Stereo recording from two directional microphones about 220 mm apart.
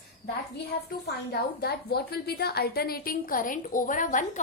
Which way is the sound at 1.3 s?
45° left (ahead or behind).